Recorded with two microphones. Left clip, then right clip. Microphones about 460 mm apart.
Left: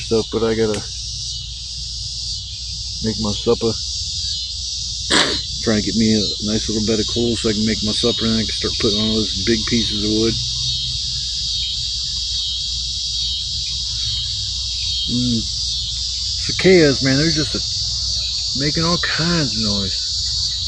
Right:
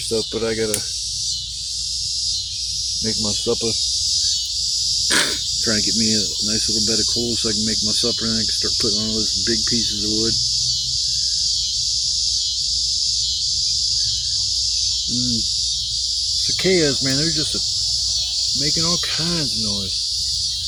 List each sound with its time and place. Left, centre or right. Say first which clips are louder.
0.1 s cricket: left 4 dB; right
3.4 s speech: left 8 dB; right
5.0 s speech: left 7 dB; right
16.6 s speech: left 7 dB; right
18.6 s speech: left 1 dB; right